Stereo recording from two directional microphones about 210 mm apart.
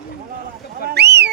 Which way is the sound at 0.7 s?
45° right (ahead or behind).